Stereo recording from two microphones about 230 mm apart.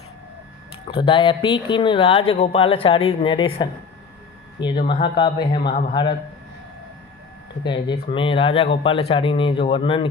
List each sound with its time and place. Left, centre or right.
0.9 s speech: left
4.9 s speech: left
7.6 s speech: centre